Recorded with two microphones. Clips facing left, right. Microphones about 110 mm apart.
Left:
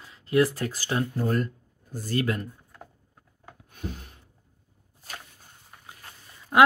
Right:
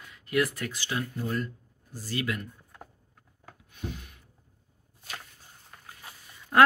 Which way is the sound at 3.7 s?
40° left (ahead or behind).